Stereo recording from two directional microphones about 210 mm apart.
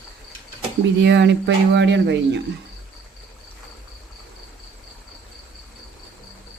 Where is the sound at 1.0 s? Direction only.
55° right (ahead or behind).